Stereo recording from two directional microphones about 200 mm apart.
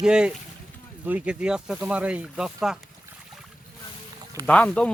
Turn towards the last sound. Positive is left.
turn(degrees=5)  # may be behind; listen again after turning